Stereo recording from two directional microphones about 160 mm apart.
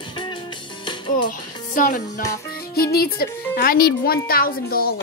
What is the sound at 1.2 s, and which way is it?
Music, 60° left (ahead or behind).